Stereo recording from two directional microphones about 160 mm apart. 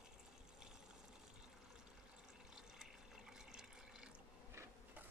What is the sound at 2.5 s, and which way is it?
Water, 5° right (ahead or behind).